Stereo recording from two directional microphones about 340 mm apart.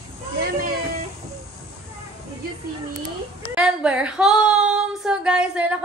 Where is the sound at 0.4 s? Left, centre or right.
Right.